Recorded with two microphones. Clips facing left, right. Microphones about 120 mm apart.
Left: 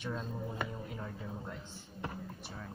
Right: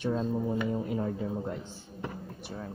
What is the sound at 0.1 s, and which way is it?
Speech, 40° right (ahead or behind).